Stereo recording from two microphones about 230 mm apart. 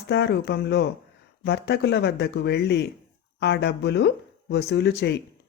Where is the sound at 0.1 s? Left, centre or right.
Left.